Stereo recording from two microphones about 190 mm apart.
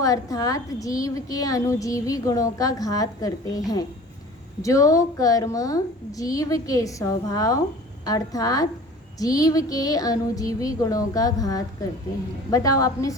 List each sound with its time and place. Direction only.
0.0 s a woman's voice: 20° left (ahead or behind)
8.0 s a sound: 20° left (ahead or behind)
12.5 s a woman's voice: 20° left (ahead or behind)